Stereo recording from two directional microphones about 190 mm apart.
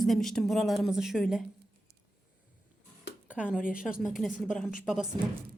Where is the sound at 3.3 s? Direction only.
5° right (ahead or behind).